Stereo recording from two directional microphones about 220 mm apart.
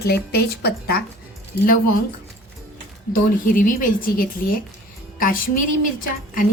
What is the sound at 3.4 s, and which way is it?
A woman's voice, 40° left (ahead or behind).